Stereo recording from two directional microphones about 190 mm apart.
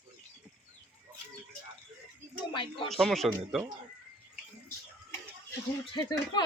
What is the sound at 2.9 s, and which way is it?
Speech, centre (ahead or behind).